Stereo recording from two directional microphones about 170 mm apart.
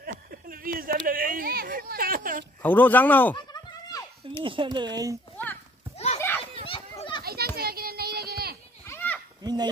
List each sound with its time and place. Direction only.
0.0 s a sound: 60° right (ahead or behind)
2.6 s speech: 10° left (ahead or behind)
3.5 s children playing: 20° left (ahead or behind)
4.4 s speech: 30° right (ahead or behind)
5.9 s children playing: 40° left (ahead or behind)
6.6 s a sound: 30° left (ahead or behind)
7.2 s children playing: 65° right (ahead or behind)
8.8 s children playing: 10° left (ahead or behind)
9.4 s fowl: 25° right (ahead or behind)